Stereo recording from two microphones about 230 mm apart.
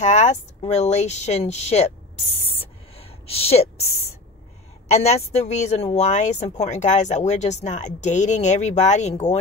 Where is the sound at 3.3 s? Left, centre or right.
Left.